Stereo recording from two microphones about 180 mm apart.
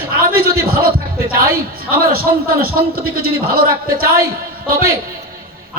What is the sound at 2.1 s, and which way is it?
Speech, 55° right (ahead or behind).